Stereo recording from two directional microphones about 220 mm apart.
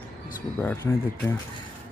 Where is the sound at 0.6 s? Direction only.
10° left (ahead or behind).